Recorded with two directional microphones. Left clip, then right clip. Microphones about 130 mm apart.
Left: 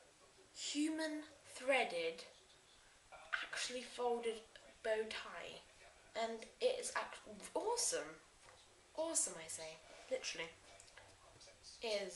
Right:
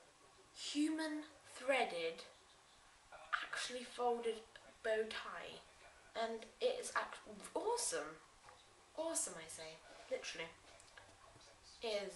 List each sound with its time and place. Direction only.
0.6 s speech: 10° left (ahead or behind)
3.3 s a woman's voice: 10° left (ahead or behind)
11.8 s a woman's voice: 10° left (ahead or behind)